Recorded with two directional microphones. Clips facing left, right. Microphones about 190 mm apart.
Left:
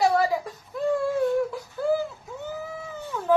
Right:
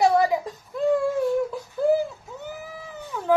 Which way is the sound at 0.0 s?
20° right (ahead or behind).